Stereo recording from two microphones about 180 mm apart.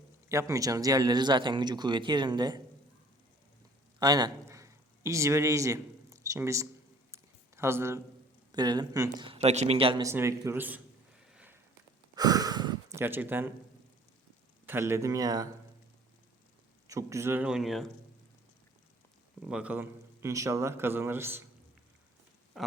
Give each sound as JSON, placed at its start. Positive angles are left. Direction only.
{"t": 0.3, "sound": "speech", "side_deg": -15}
{"t": 4.0, "sound": "a man's voice", "side_deg": -20}
{"t": 7.1, "sound": "a sound", "side_deg": -15}
{"t": 8.5, "sound": "speech", "side_deg": -25}
{"t": 10.0, "sound": "a man's voice", "side_deg": -15}
{"t": 11.3, "sound": "a sound", "side_deg": -10}
{"t": 12.1, "sound": "gasp", "side_deg": -20}
{"t": 14.7, "sound": "a man's voice", "side_deg": -15}
{"t": 16.8, "sound": "a man's voice", "side_deg": -15}
{"t": 19.4, "sound": "a man's voice", "side_deg": -5}
{"t": 22.5, "sound": "speech", "side_deg": 0}